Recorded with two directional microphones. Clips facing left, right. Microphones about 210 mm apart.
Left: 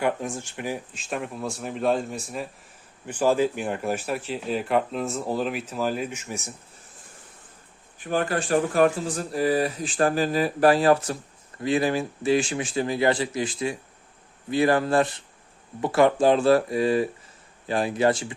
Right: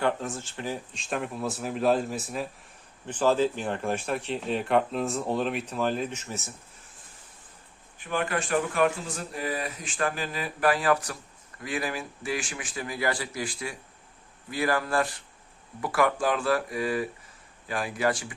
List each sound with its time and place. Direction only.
0.0 s speech: 15° left (ahead or behind)
0.9 s speech: centre (ahead or behind)
3.1 s speech: 10° left (ahead or behind)
7.9 s speech: 40° left (ahead or behind); by 18.3 s 25° left (ahead or behind)